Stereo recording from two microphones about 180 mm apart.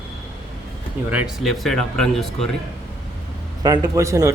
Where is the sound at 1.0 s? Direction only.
5° right (ahead or behind).